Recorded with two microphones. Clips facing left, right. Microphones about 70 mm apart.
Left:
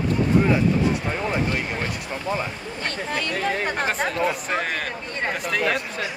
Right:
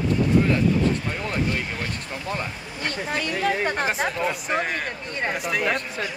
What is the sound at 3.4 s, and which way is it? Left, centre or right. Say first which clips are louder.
Speech: right 2 dB; centre.